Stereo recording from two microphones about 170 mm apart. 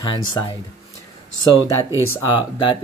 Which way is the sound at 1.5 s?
15° right (ahead or behind).